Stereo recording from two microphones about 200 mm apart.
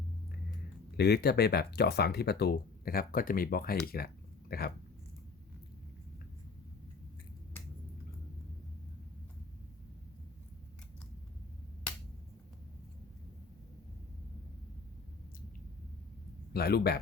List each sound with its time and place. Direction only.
0.9 s speech: 55° left (ahead or behind)
3.9 s a sound: 50° left (ahead or behind)
16.5 s speech: 50° left (ahead or behind)